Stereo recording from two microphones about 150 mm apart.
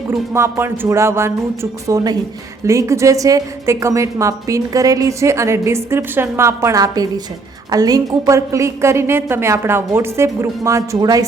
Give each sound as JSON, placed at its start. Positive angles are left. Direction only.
{"t": 0.1, "sound": "a woman's voice", "side_deg": -15}